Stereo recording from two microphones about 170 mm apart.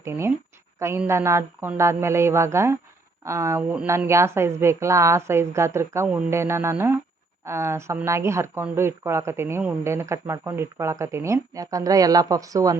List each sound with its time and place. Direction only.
0.0 s speech: 15° right (ahead or behind)